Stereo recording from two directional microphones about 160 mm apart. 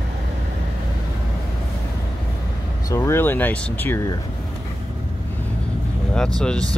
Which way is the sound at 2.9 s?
15° left (ahead or behind).